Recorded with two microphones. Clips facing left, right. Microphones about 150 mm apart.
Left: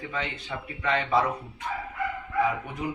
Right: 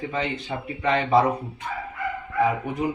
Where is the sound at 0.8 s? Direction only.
25° right (ahead or behind).